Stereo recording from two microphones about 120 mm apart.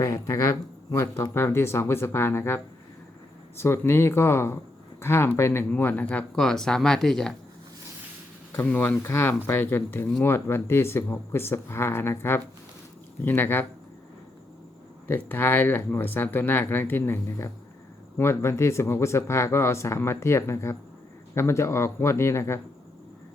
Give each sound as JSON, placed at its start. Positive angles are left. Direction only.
{"t": 0.0, "sound": "speech", "side_deg": 25}
{"t": 3.6, "sound": "speech", "side_deg": 20}
{"t": 8.5, "sound": "speech", "side_deg": 15}
{"t": 15.0, "sound": "speech", "side_deg": 20}